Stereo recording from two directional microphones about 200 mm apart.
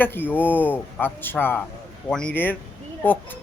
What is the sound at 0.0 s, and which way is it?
Speech, 10° left (ahead or behind).